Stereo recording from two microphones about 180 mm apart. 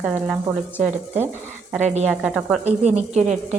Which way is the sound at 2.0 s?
5° right (ahead or behind).